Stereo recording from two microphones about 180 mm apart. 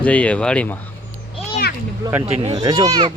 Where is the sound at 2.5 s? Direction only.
20° right (ahead or behind).